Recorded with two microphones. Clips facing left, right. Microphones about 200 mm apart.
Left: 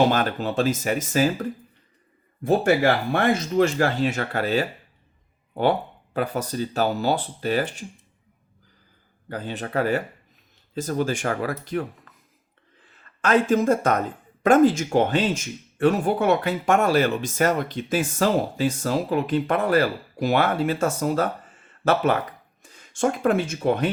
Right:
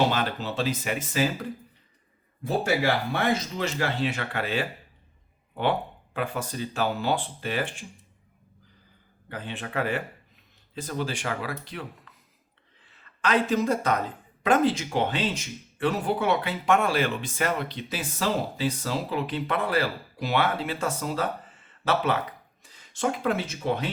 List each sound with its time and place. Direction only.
0.1 s speech: 45° left (ahead or behind)
2.4 s speech: 50° left (ahead or behind)
6.1 s speech: 40° left (ahead or behind)
9.3 s speech: 40° left (ahead or behind)